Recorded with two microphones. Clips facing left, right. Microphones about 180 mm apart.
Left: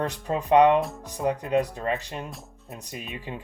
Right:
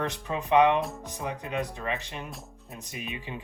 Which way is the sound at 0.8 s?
Centre (ahead or behind).